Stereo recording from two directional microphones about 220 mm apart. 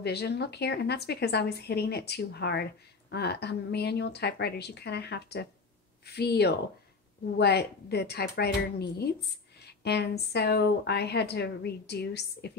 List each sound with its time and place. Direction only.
0.0 s a woman's voice: 50° left (ahead or behind)